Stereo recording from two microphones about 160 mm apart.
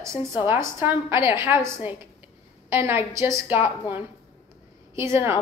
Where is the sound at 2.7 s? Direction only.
15° right (ahead or behind).